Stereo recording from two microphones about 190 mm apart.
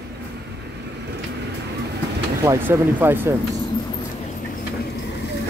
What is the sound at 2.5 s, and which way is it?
Speech, 10° right (ahead or behind).